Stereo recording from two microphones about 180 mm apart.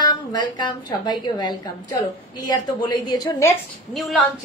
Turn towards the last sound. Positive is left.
turn(degrees=0)  # may be behind; listen again after turning